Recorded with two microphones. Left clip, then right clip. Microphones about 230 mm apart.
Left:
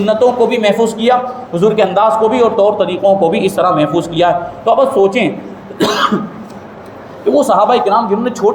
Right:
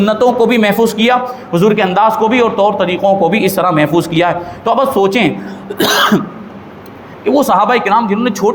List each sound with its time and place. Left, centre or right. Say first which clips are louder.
0.0 s a man's voice: even; right
7.3 s a man's voice: even; right